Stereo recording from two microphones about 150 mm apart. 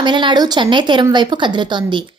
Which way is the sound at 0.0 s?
30° right (ahead or behind).